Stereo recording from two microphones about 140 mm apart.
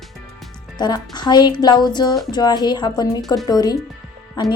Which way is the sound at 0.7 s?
30° left (ahead or behind).